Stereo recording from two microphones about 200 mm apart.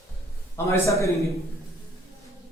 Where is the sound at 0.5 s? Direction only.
15° left (ahead or behind).